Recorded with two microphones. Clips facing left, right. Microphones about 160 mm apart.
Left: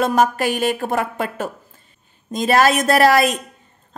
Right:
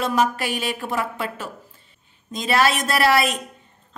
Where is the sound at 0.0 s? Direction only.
45° left (ahead or behind).